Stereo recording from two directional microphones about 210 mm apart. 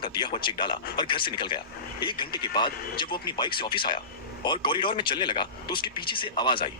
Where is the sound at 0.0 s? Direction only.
20° left (ahead or behind).